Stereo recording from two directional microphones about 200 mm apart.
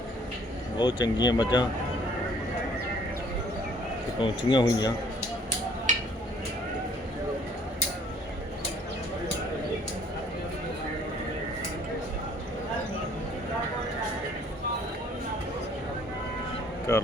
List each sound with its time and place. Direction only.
0.8 s speech: 20° left (ahead or behind)
4.2 s speech: 25° left (ahead or behind)
16.9 s a sound: 15° left (ahead or behind)